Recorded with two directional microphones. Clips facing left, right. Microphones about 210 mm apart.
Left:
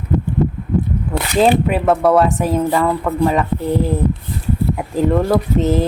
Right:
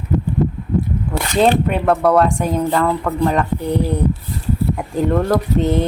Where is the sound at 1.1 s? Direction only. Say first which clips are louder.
Left 1 dB; centre (ahead or behind).